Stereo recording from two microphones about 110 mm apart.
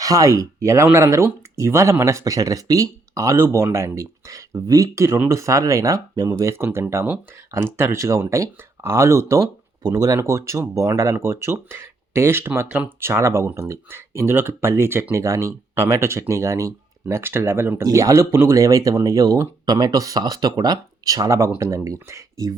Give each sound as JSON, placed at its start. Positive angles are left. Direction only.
{"t": 0.0, "sound": "speech", "side_deg": -30}
{"t": 13.0, "sound": "speech", "side_deg": -25}